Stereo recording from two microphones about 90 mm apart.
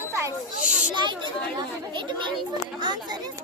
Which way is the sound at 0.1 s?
30° right (ahead or behind).